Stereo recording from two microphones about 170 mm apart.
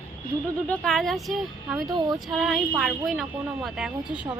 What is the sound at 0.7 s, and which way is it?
A woman's voice, centre (ahead or behind).